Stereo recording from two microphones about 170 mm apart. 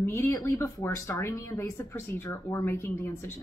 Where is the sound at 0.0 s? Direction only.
15° left (ahead or behind).